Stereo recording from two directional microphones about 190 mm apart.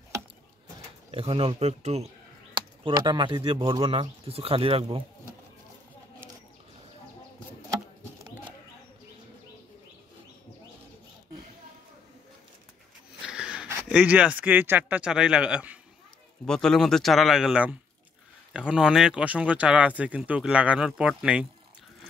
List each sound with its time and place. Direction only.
1.1 s speech: 30° right (ahead or behind)
13.2 s speech: 5° right (ahead or behind)